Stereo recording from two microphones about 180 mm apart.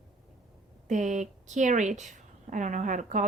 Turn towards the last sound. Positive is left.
turn(degrees=-45)  # may be behind; listen again after turning